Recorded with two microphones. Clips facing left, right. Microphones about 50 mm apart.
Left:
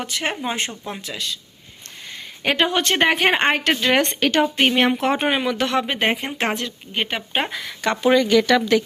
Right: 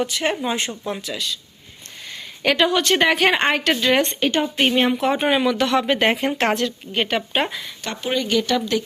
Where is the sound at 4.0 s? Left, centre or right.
Left.